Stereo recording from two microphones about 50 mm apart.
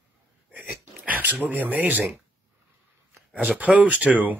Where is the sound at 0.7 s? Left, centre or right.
Right.